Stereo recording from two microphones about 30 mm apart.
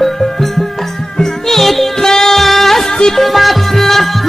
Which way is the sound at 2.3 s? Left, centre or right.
Centre.